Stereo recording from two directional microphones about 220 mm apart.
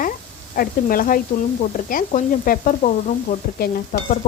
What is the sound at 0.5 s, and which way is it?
Sizzle, 40° left (ahead or behind).